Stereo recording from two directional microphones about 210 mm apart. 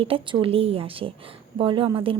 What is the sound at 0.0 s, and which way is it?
Speech, 25° right (ahead or behind).